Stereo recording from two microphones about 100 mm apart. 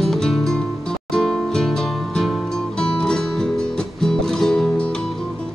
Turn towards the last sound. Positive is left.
turn(degrees=10)  # may be behind; listen again after turning